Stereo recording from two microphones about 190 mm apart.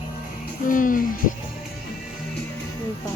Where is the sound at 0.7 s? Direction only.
45° left (ahead or behind).